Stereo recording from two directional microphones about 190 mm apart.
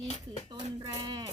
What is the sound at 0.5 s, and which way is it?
Speech, 25° right (ahead or behind).